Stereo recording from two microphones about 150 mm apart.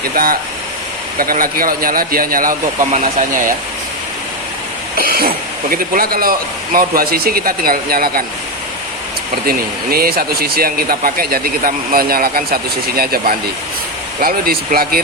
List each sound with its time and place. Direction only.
1.2 s speech: 70° right (ahead or behind)
4.9 s cough: 85° right
5.7 s speech: 75° right (ahead or behind)
9.5 s speech: 85° right
13.0 s speech: 90° right
14.2 s speech: 80° right